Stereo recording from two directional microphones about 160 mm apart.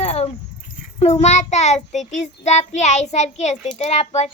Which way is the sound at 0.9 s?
40° left (ahead or behind).